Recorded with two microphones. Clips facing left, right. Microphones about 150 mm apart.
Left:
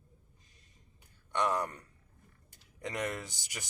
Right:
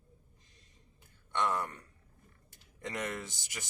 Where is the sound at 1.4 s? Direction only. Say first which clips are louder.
Left 1 dB; 20° left (ahead or behind).